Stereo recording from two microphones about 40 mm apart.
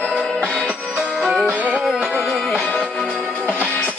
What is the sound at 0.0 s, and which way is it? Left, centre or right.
Music, left.